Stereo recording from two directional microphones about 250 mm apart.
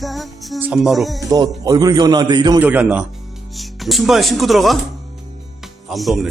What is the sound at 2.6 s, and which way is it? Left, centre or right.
A man's voice, centre.